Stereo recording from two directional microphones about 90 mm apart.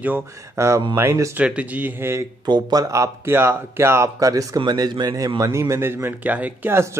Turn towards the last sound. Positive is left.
turn(degrees=-20)  # may be behind; listen again after turning